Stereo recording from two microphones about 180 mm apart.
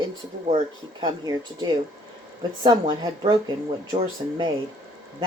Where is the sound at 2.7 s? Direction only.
25° right (ahead or behind).